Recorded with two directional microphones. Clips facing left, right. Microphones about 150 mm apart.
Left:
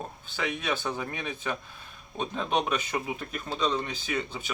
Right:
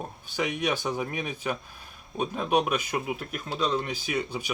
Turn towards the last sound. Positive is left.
turn(degrees=-10)  # may be behind; listen again after turning